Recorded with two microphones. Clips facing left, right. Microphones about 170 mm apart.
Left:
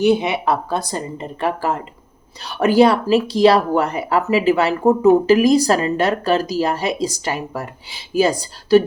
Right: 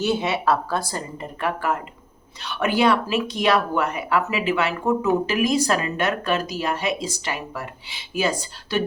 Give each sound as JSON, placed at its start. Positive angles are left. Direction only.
{"t": 0.0, "sound": "a woman's voice", "side_deg": 15}